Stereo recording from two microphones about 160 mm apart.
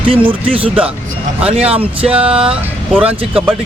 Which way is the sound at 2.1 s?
5° right (ahead or behind).